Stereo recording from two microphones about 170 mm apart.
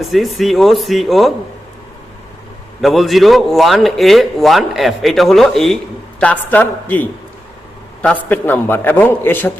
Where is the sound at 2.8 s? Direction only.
Centre (ahead or behind).